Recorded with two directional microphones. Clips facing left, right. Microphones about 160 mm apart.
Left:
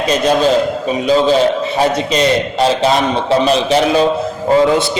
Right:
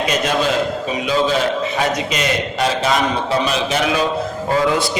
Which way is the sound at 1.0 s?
30° left (ahead or behind).